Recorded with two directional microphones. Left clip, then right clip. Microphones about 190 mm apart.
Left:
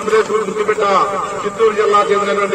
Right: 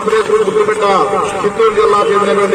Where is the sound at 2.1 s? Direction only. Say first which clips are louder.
Right 3 dB; centre (ahead or behind).